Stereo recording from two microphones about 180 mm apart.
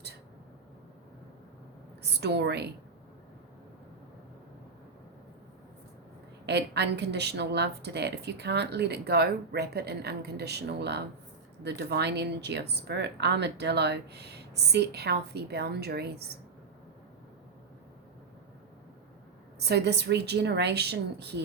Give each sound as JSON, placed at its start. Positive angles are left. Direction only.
{"t": 2.2, "sound": "a woman's voice", "side_deg": -70}
{"t": 6.4, "sound": "a woman's voice", "side_deg": -70}
{"t": 19.5, "sound": "a woman's voice", "side_deg": -65}